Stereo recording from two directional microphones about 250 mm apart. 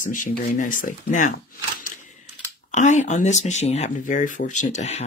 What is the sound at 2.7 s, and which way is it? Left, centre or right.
Speech, left.